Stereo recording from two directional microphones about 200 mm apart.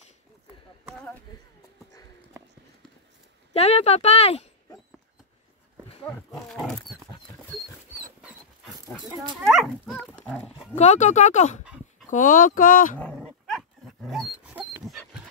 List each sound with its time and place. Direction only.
3.5 s speech: 30° left (ahead or behind)
6.0 s speech: centre (ahead or behind)
9.4 s dog: centre (ahead or behind)
10.7 s speech: 35° left (ahead or behind)
11.6 s dog: 5° right (ahead or behind)
12.1 s speech: 40° left (ahead or behind)
12.9 s dog: 5° left (ahead or behind)